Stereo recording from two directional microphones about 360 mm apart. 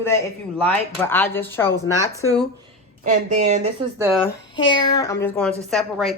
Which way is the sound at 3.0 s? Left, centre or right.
Centre.